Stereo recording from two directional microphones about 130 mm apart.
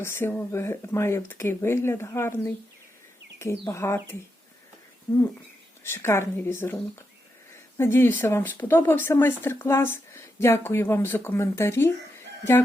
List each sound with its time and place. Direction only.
0.0 s speech: 20° left (ahead or behind)
5.8 s speech: 20° left (ahead or behind)
7.8 s speech: 20° left (ahead or behind)